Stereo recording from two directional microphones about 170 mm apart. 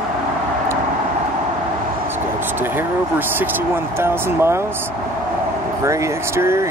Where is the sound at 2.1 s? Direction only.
10° right (ahead or behind).